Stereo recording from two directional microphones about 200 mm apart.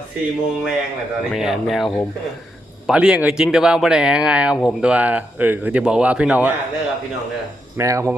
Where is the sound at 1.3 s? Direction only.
Centre (ahead or behind).